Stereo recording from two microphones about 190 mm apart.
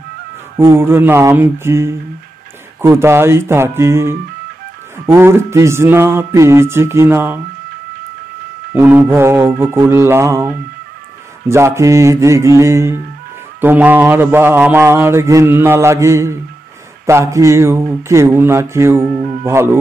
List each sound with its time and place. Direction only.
0.6 s mantra: 10° right (ahead or behind)
8.7 s mantra: 10° right (ahead or behind)